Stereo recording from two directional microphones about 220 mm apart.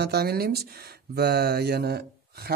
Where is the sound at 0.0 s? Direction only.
45° right (ahead or behind).